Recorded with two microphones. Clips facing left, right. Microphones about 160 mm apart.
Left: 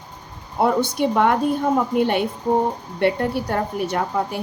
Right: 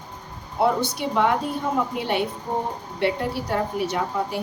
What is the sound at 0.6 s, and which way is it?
A woman's voice, 50° left (ahead or behind).